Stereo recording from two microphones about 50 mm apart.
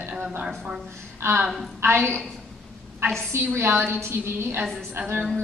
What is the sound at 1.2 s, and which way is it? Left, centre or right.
Speech, right.